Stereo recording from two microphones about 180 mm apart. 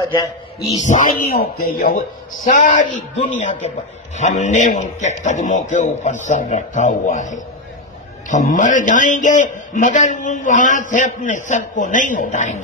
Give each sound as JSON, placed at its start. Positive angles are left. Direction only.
{"t": 0.0, "sound": "a man's voice", "side_deg": 15}
{"t": 0.8, "sound": "a man's voice", "side_deg": 50}